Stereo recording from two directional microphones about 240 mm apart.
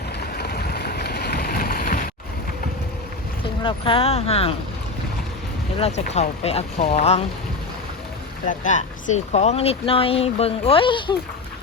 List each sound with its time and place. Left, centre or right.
0.3 s a sound: left
3.6 s speech: left
5.8 s speech: left
8.4 s speech: left